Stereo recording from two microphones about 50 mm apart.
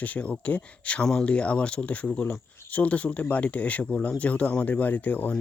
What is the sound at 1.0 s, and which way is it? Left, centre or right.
Speech, centre.